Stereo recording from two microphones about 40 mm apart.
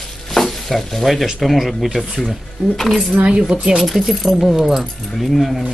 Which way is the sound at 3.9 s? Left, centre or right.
Centre.